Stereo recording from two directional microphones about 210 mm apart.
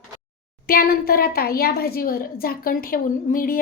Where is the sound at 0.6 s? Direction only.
45° left (ahead or behind).